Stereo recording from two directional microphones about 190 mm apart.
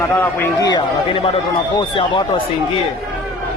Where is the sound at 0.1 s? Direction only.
10° left (ahead or behind).